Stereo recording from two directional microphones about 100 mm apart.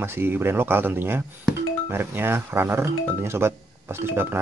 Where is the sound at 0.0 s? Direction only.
20° right (ahead or behind).